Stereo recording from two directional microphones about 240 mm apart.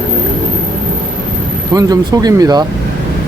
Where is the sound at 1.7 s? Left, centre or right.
Centre.